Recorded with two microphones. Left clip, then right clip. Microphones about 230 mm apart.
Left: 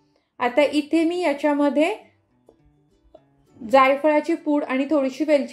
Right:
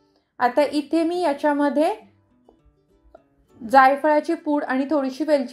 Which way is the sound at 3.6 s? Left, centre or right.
Centre.